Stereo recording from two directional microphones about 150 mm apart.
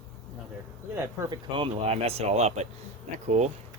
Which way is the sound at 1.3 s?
35° right (ahead or behind).